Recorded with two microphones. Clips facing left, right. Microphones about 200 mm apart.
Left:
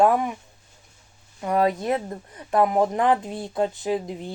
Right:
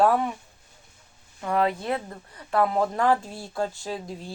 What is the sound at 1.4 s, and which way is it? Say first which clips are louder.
Speech: left 3 dB; 20° left (ahead or behind).